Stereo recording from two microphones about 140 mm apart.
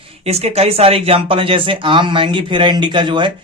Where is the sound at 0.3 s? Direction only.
50° right (ahead or behind).